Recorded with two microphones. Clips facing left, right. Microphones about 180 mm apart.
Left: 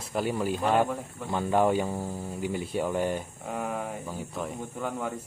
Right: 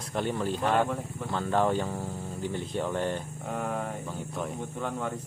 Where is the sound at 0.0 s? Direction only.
5° left (ahead or behind).